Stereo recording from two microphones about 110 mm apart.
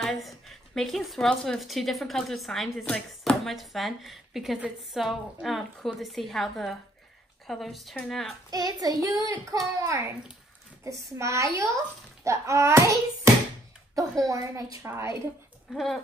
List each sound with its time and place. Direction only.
0.0 s a woman's voice: centre (ahead or behind)
8.5 s child singing: 35° right (ahead or behind)
9.8 s a child's voice: 30° right (ahead or behind)
14.2 s child singing: 30° right (ahead or behind)
14.8 s a child's voice: 25° right (ahead or behind)
15.7 s a woman's voice: centre (ahead or behind)